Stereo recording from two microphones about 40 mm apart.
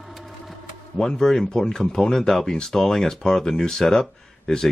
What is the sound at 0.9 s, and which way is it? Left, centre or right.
Speech, centre.